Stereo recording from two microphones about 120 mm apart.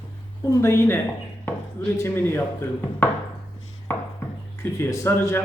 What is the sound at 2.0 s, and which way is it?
Speech, 20° left (ahead or behind).